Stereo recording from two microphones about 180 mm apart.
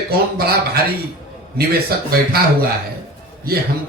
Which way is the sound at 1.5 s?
60° right (ahead or behind).